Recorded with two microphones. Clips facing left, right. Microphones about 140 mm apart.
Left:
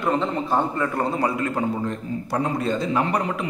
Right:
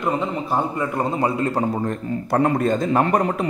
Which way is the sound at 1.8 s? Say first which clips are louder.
Right 3 dB; 55° right (ahead or behind).